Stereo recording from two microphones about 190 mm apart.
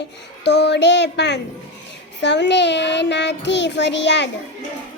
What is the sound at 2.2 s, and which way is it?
Child singing, 65° left (ahead or behind).